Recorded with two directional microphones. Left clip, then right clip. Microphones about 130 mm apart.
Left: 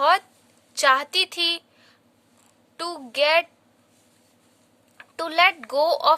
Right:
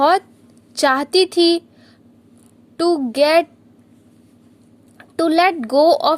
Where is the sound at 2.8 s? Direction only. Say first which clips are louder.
Right 8 dB; 25° right (ahead or behind).